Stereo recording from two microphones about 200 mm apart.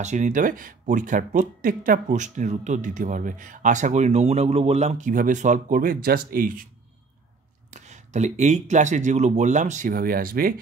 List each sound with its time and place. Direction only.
0.0 s speech: 35° right (ahead or behind)
7.7 s speech: 35° right (ahead or behind)